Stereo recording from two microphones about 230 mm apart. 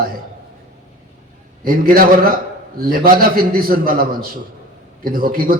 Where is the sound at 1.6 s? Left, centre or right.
Right.